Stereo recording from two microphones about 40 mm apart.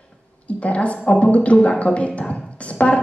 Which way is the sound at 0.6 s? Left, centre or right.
Left.